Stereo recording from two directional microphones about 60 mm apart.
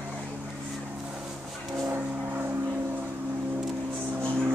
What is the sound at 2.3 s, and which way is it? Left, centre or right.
Vehicle, right.